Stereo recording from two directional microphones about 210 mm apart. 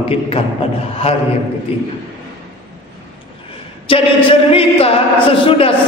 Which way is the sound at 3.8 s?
25° left (ahead or behind).